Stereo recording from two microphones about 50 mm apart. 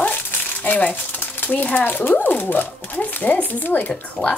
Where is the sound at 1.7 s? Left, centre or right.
Left.